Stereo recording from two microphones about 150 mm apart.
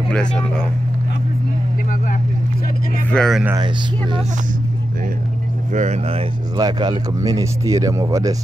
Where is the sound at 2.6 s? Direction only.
70° left (ahead or behind).